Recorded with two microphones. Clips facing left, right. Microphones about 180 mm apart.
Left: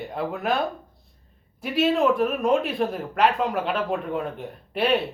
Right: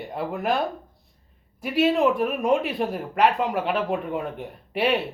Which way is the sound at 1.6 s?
10° right (ahead or behind).